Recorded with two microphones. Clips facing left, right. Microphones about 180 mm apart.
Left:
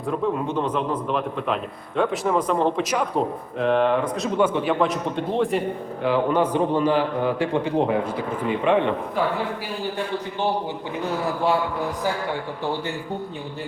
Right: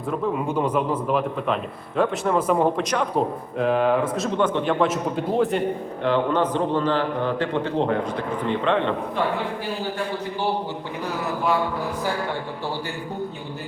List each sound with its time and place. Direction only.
0.1 s a man's voice: 5° right (ahead or behind)
4.4 s a man's voice: 10° left (ahead or behind)